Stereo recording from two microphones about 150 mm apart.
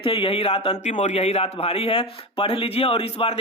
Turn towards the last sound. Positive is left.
turn(degrees=40)  # may be behind; listen again after turning